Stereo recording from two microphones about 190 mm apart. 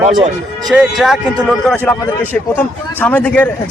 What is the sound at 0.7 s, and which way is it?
A man's voice, centre (ahead or behind).